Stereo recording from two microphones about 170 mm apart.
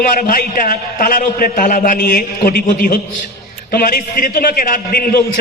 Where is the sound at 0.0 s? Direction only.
50° left (ahead or behind).